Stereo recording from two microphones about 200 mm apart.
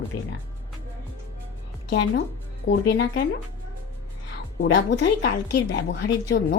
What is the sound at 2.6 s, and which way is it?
Speech, 55° left (ahead or behind).